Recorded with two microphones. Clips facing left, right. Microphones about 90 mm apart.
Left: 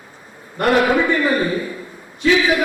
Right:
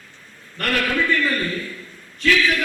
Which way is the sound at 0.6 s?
20° left (ahead or behind).